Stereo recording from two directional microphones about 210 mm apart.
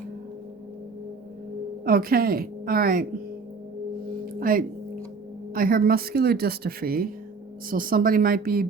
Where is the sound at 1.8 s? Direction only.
45° right (ahead or behind).